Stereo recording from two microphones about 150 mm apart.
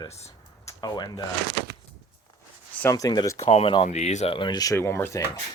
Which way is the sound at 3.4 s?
45° left (ahead or behind).